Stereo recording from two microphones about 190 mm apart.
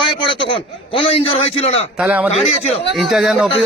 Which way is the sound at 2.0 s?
5° right (ahead or behind).